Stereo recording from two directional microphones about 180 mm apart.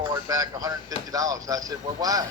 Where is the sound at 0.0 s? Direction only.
20° right (ahead or behind).